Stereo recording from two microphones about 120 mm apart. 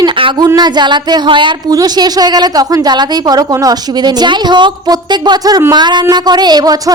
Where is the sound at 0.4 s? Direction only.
35° right (ahead or behind).